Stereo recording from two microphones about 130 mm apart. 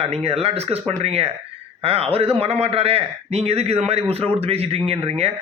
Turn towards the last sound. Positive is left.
turn(degrees=-50)  # may be behind; listen again after turning